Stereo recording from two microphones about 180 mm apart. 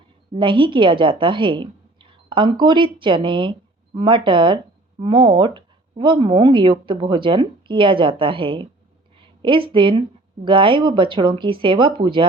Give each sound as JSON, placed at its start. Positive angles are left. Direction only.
{"t": 0.3, "sound": "a woman's voice", "side_deg": -30}